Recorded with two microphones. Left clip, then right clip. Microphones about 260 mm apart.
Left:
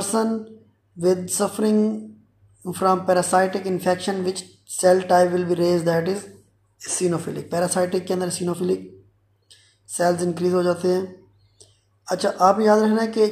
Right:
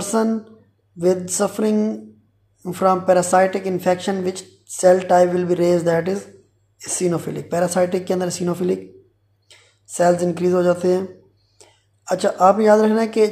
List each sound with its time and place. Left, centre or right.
0.0 s a sound: centre
0.9 s a woman's voice: centre
9.9 s a woman's voice: right